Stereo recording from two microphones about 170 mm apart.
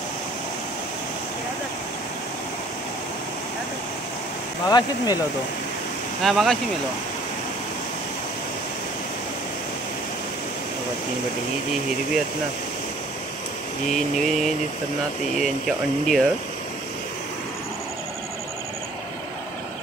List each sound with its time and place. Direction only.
4.6 s speech: 25° left (ahead or behind)
6.2 s speech: centre (ahead or behind)
13.8 s speech: centre (ahead or behind)